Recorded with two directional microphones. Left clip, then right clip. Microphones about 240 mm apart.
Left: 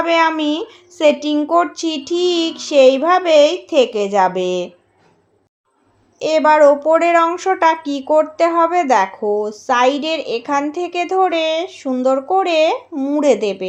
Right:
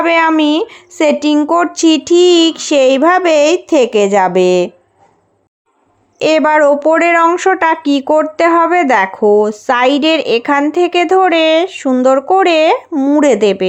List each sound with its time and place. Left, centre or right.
0.0 s speech: right
6.1 s speech: right